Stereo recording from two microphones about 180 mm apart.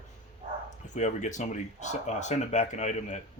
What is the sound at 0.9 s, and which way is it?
Speech, 40° left (ahead or behind).